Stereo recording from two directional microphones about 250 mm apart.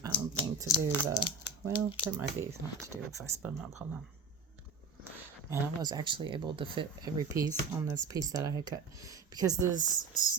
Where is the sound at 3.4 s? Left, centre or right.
Centre.